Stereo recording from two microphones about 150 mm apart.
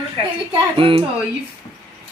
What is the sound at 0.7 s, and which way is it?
Speech, 35° right (ahead or behind).